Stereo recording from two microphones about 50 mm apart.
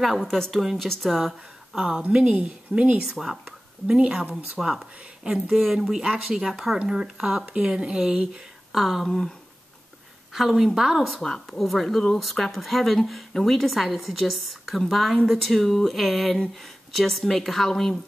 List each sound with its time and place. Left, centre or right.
0.0 s speech: centre
2.1 s a woman's voice: centre
3.1 s a woman's voice: centre
4.6 s a woman's voice: centre
8.7 s speech: centre
10.3 s a woman's voice: centre
11.4 s speech: centre